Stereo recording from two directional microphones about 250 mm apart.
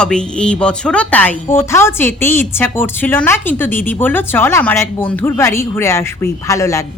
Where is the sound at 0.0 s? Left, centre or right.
Centre.